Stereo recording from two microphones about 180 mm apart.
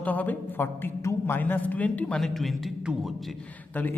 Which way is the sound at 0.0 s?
10° left (ahead or behind).